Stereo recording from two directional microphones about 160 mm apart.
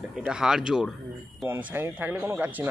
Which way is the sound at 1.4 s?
15° right (ahead or behind).